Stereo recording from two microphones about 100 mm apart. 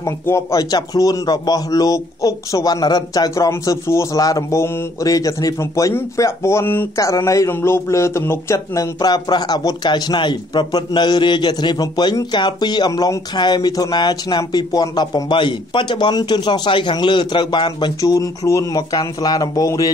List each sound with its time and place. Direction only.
0.0 s speech: 30° left (ahead or behind)
7.0 s speech: 30° left (ahead or behind); by 17.9 s 50° left (ahead or behind)
18.0 s speech: 35° left (ahead or behind)